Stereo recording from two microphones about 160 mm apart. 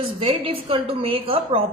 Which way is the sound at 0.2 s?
35° right (ahead or behind).